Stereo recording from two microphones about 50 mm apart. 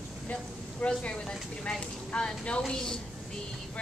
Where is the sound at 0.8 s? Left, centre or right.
Left.